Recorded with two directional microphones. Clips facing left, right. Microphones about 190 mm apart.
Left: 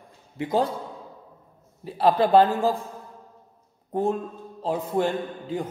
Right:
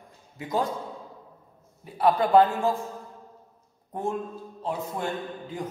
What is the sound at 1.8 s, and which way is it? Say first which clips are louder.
Speech: left 2 dB; 30° left (ahead or behind).